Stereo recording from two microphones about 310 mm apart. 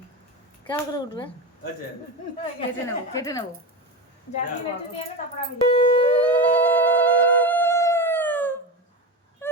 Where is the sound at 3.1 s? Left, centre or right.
Centre.